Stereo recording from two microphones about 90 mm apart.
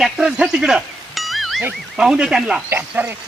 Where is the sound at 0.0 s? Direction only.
5° right (ahead or behind).